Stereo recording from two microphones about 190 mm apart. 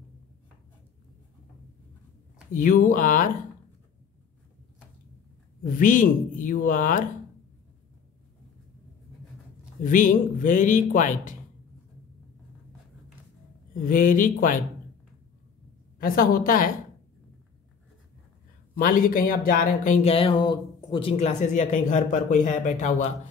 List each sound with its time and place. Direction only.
2.5 s a man's voice: 45° left (ahead or behind)
5.7 s a man's voice: 45° left (ahead or behind)
9.8 s a man's voice: 45° left (ahead or behind)
13.8 s a man's voice: 45° left (ahead or behind)
16.0 s a man's voice: 50° left (ahead or behind)
18.8 s speech: 45° left (ahead or behind)